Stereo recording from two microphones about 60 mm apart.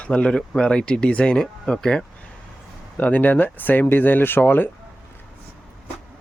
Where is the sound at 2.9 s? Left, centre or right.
Left.